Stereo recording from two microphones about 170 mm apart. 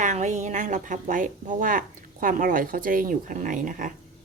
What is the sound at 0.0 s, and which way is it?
Speech, 45° right (ahead or behind).